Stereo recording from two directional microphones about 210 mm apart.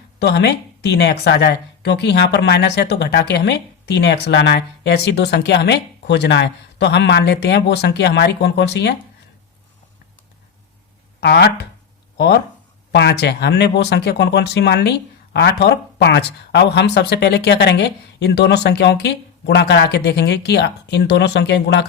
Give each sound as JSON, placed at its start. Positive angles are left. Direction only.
{"t": 0.2, "sound": "speech", "side_deg": 55}
{"t": 11.2, "sound": "speech", "side_deg": 50}